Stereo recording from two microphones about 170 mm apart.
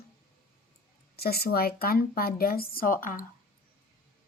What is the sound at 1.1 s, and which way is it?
Speech, 65° left (ahead or behind).